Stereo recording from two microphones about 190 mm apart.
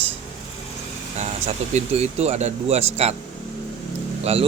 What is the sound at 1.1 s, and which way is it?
Speech, 35° right (ahead or behind).